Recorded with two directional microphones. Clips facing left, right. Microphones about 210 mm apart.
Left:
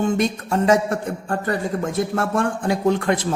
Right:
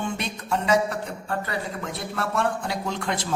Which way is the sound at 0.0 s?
45° left (ahead or behind).